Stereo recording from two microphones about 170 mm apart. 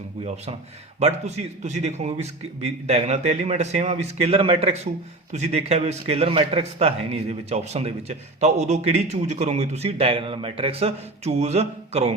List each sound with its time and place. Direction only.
0.9 s speech: 40° right (ahead or behind)